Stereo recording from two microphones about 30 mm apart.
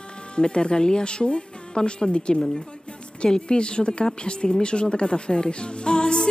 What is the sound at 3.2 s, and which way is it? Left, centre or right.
Speech, left.